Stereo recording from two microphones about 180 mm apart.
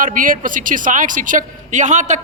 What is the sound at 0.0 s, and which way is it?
A woman's voice, 50° right (ahead or behind).